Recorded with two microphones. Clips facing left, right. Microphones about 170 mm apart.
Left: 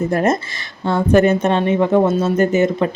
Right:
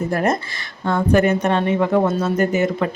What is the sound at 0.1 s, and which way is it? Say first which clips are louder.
Speech: left 3 dB; 25° left (ahead or behind).